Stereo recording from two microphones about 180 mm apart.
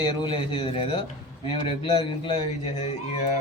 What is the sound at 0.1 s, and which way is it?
A man's voice, 25° left (ahead or behind).